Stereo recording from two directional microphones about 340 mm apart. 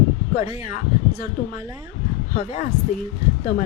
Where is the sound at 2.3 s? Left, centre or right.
Left.